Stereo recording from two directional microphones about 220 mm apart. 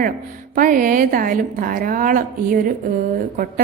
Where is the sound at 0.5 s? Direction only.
40° right (ahead or behind).